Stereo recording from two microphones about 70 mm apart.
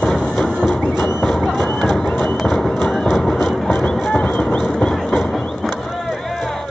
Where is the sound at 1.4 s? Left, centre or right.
Centre.